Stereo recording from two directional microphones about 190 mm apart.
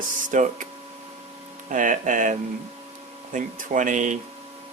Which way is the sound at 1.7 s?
40° right (ahead or behind).